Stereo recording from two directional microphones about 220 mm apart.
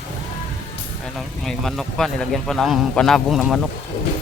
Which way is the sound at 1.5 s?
Centre (ahead or behind).